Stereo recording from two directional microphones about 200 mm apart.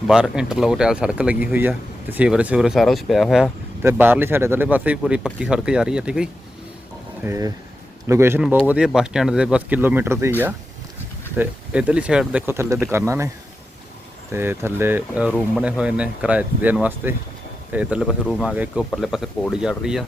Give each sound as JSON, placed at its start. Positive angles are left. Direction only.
{"t": 0.1, "sound": "speech", "side_deg": -5}
{"t": 7.3, "sound": "speech", "side_deg": -15}
{"t": 11.3, "sound": "speech", "side_deg": -5}
{"t": 14.3, "sound": "speech", "side_deg": -10}